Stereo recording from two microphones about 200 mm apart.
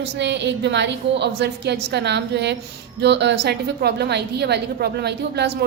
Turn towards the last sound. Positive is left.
turn(degrees=-55)  # may be behind; listen again after turning